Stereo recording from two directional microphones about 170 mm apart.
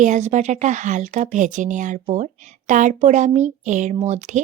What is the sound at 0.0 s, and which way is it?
Speech, 45° right (ahead or behind).